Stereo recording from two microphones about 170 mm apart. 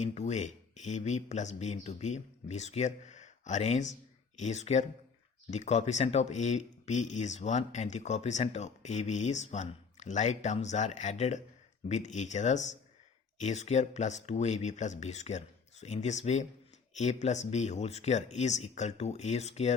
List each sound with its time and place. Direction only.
0.0 s speech: 40° left (ahead or behind)